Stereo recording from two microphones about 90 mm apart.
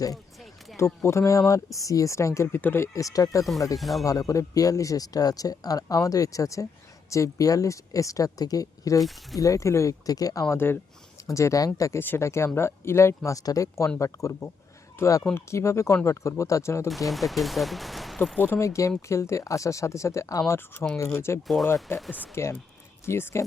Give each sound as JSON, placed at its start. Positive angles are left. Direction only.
{"t": 1.0, "sound": "speech", "side_deg": 35}
{"t": 3.8, "sound": "speech", "side_deg": 0}
{"t": 4.0, "sound": "speech", "side_deg": 40}
{"t": 9.0, "sound": "speech", "side_deg": 0}
{"t": 9.4, "sound": "speech", "side_deg": 35}
{"t": 10.5, "sound": "speech", "side_deg": 25}
{"t": 11.9, "sound": "speech", "side_deg": 25}
{"t": 16.9, "sound": "speech", "side_deg": 0}
{"t": 18.3, "sound": "speech", "side_deg": 25}
{"t": 21.4, "sound": "speech", "side_deg": 0}
{"t": 22.4, "sound": "speech", "side_deg": 30}